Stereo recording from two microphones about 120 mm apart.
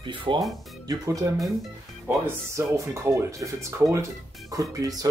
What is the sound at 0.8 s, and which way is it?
Speech, 25° right (ahead or behind).